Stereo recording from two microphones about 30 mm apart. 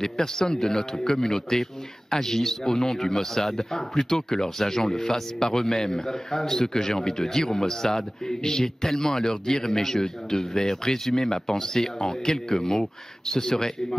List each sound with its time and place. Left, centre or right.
0.0 s a man's voice: centre